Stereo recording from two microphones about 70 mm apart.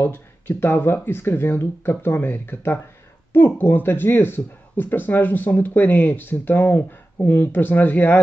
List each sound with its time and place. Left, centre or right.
0.0 s speech: left